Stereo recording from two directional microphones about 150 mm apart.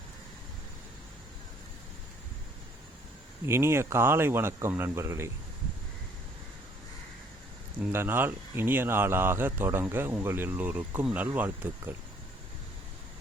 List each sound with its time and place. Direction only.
3.4 s speech: 15° right (ahead or behind)
7.8 s speech: 15° right (ahead or behind)